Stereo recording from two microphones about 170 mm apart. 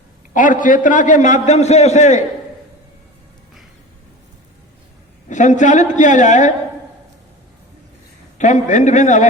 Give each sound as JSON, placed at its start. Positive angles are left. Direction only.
{"t": 0.3, "sound": "a man's voice", "side_deg": 50}
{"t": 5.3, "sound": "a man's voice", "side_deg": 45}
{"t": 8.4, "sound": "a man's voice", "side_deg": 45}